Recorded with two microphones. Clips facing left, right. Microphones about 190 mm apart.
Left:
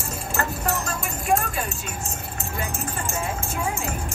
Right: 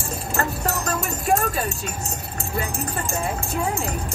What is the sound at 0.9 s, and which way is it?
Speech, 40° right (ahead or behind).